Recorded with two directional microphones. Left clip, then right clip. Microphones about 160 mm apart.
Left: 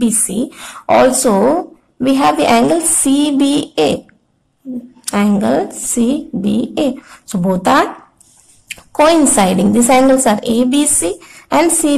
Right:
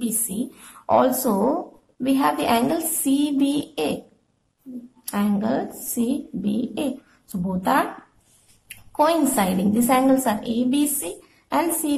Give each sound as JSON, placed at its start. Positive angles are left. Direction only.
{"t": 0.5, "sound": "a woman's voice", "side_deg": 25}
{"t": 5.0, "sound": "a woman's voice", "side_deg": 30}